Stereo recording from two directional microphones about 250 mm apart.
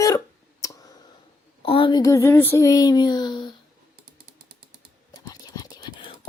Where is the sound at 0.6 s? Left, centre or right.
Centre.